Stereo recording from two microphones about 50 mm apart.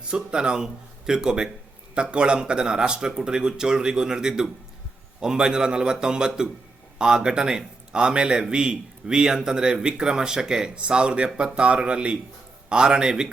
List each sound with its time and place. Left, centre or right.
0.1 s a man's voice: centre